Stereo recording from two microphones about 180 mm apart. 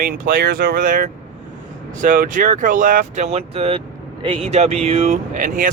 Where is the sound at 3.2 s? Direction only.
35° right (ahead or behind).